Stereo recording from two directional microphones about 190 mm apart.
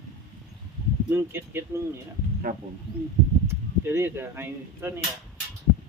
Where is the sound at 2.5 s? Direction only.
45° right (ahead or behind).